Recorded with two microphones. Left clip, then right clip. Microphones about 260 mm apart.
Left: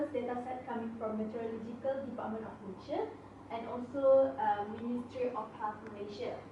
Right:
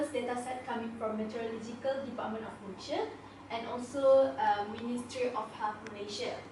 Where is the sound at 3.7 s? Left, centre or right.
Left.